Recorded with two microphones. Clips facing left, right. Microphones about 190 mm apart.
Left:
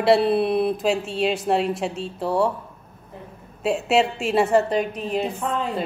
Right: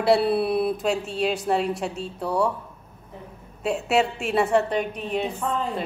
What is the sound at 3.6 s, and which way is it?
A woman's voice, centre (ahead or behind).